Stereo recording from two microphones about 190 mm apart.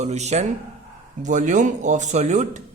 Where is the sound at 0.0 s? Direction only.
35° right (ahead or behind).